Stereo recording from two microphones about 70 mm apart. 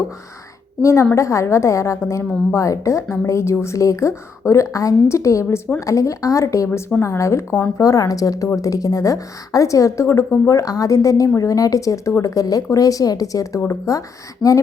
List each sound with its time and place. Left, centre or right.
0.8 s speech: left
14.4 s speech: centre